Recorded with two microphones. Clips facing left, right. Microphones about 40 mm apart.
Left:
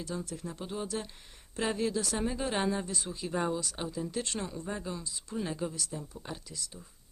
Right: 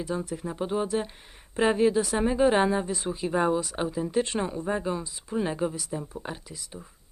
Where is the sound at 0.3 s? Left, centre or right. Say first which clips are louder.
Right 9 dB; right.